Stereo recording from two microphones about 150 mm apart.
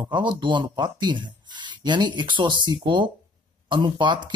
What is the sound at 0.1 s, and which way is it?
Speech, 30° right (ahead or behind).